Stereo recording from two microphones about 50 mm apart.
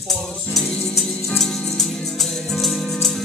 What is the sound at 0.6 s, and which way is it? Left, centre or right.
Music, left.